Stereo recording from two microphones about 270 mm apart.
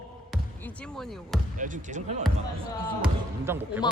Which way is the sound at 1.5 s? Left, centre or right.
Right.